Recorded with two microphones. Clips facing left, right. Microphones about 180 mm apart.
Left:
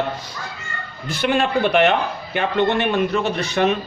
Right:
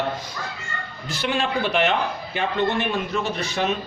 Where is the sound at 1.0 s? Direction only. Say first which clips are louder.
Left 5 dB; 55° left (ahead or behind).